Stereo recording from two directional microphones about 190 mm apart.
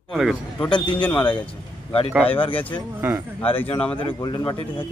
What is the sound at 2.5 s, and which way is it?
Speech, 10° left (ahead or behind).